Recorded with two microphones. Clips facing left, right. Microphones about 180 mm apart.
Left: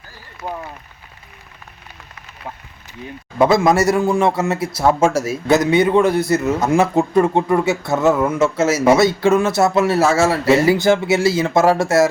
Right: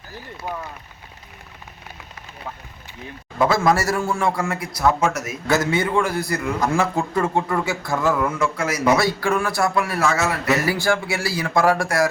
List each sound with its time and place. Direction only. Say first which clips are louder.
3.3 s a man's voice: left 5 dB; 20° left (ahead or behind)
5.5 s a man's voice: left 6 dB; 20° left (ahead or behind)